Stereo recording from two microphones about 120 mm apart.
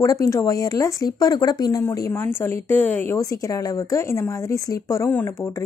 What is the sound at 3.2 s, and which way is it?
Speech, 30° left (ahead or behind).